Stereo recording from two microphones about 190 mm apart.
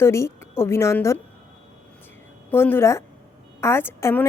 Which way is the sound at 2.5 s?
10° left (ahead or behind).